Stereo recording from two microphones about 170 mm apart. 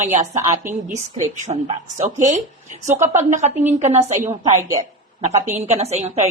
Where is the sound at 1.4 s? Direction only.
35° right (ahead or behind).